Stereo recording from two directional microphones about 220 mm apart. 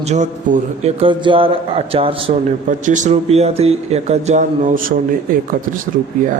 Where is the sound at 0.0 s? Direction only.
35° right (ahead or behind).